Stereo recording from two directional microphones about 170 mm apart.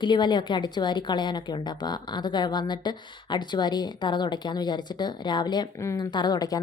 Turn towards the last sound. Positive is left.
turn(degrees=20)  # may be behind; listen again after turning